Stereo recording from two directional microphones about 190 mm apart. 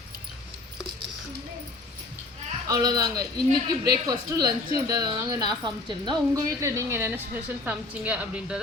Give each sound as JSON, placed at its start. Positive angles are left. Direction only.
{"t": 2.6, "sound": "speech", "side_deg": -20}